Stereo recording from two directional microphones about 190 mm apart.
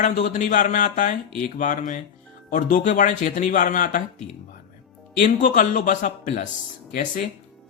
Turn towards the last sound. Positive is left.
turn(degrees=45)  # may be behind; listen again after turning